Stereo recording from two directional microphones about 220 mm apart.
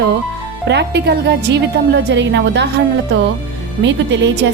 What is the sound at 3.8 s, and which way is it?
Speech, 55° right (ahead or behind).